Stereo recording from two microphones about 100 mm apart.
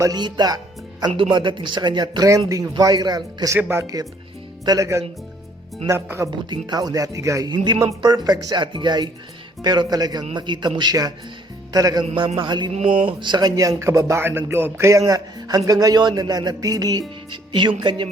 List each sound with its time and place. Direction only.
0.0 s speech: 45° right (ahead or behind)
1.0 s speech: 55° right (ahead or behind)
3.6 s speech: 25° right (ahead or behind)
4.6 s speech: 35° right (ahead or behind)
6.5 s speech: 45° right (ahead or behind)
7.4 s speech: 50° right (ahead or behind)
8.6 s speech: 50° right (ahead or behind)
12.0 s a man's voice: 75° right (ahead or behind); by 12.7 s 50° right (ahead or behind)
12.7 s speech: 65° right (ahead or behind)
13.2 s speech: 45° right (ahead or behind)
17.5 s speech: 50° right (ahead or behind)